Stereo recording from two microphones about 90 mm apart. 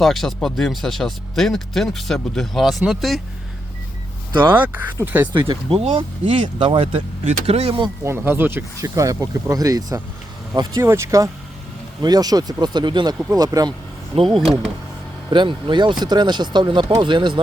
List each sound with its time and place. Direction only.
0.0 s speech: centre (ahead or behind)
4.4 s speech: 20° right (ahead or behind)
5.3 s speech: 65° right (ahead or behind)
8.0 s speech: 25° right (ahead or behind)
8.8 s speech: 40° right (ahead or behind)
12.0 s speech: 45° right (ahead or behind)
13.3 s speech: 45° right (ahead or behind)
14.3 s speech: centre (ahead or behind)
15.3 s speech: 65° right (ahead or behind)